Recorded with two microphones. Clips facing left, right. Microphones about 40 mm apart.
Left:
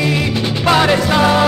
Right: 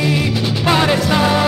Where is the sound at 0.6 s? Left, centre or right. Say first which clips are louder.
Left 2 dB; centre.